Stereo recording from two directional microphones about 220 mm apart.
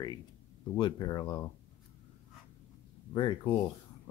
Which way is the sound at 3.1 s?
20° left (ahead or behind).